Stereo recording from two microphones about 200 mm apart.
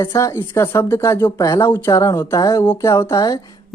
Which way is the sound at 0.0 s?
15° left (ahead or behind).